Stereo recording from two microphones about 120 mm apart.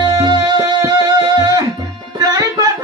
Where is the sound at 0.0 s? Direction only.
35° right (ahead or behind).